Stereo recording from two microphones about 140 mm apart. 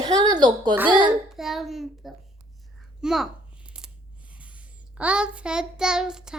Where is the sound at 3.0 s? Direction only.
5° right (ahead or behind).